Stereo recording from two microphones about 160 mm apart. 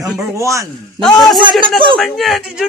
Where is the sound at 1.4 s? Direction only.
30° right (ahead or behind).